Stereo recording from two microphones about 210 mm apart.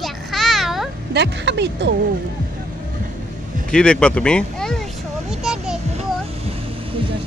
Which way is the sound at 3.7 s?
5° left (ahead or behind).